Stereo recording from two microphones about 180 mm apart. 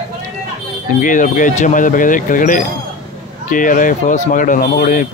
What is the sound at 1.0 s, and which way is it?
Speech, 45° left (ahead or behind).